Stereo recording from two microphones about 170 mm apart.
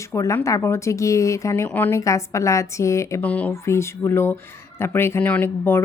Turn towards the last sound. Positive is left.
turn(degrees=10)  # may be behind; listen again after turning